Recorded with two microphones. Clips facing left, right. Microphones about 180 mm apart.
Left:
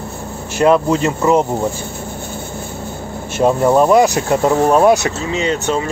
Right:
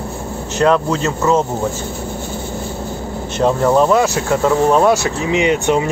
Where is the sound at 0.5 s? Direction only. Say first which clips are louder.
Left 2 dB; 10° left (ahead or behind).